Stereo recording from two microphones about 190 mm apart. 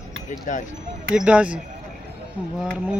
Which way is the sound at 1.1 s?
5° right (ahead or behind).